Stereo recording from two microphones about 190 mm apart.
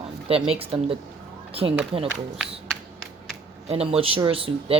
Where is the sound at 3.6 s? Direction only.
30° right (ahead or behind).